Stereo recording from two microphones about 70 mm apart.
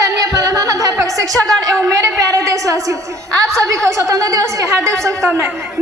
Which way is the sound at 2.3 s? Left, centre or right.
Right.